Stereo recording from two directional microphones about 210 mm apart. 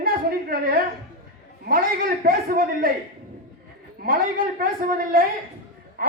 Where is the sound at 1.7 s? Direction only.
45° right (ahead or behind).